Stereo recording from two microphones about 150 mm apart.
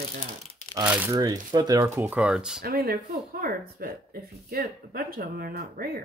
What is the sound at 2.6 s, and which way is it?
Speech, 90° right.